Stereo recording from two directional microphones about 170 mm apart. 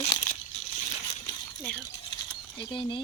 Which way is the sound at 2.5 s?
30° left (ahead or behind).